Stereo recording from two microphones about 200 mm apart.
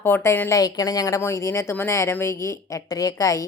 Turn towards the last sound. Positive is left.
turn(degrees=15)  # may be behind; listen again after turning